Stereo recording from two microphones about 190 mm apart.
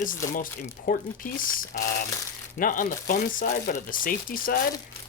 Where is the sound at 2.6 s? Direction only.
45° left (ahead or behind).